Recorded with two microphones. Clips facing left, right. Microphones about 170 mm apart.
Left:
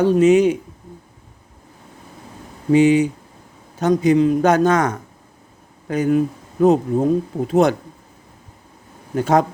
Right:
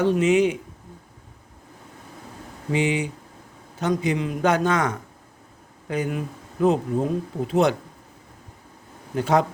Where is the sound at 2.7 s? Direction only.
40° left (ahead or behind).